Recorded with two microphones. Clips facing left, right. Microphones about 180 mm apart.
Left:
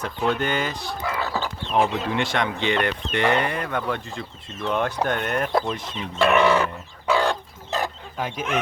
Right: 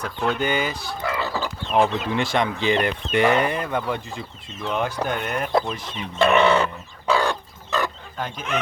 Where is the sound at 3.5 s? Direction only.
25° right (ahead or behind).